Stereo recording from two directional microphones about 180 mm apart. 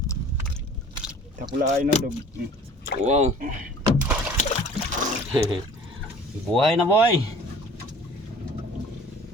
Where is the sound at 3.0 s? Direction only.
35° right (ahead or behind).